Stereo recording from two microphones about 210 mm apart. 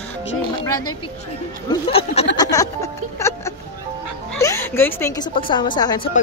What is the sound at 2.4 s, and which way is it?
Music, 15° left (ahead or behind).